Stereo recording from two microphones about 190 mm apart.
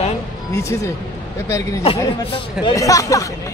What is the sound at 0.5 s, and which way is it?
Speech, 15° left (ahead or behind).